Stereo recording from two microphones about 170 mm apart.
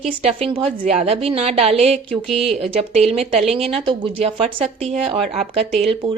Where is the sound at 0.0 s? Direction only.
40° right (ahead or behind).